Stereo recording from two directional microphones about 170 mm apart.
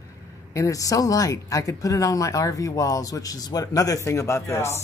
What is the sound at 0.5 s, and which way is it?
Speech, 20° left (ahead or behind).